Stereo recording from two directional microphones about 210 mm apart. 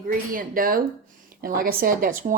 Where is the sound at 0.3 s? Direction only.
40° right (ahead or behind).